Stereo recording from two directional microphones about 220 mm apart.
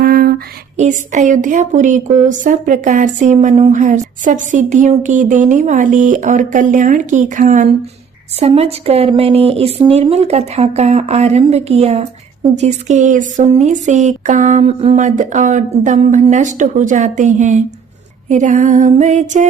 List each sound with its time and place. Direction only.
0.0 s speech: 40° right (ahead or behind)